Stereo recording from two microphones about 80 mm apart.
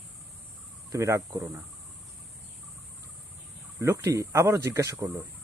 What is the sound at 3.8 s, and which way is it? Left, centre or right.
Speech, right.